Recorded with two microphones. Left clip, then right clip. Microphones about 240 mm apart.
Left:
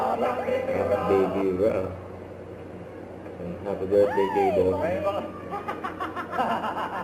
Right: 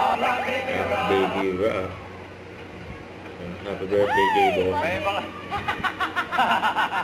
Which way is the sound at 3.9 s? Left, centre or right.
Centre.